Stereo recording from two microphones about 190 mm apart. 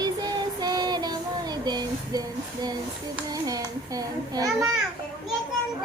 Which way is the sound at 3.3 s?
20° right (ahead or behind).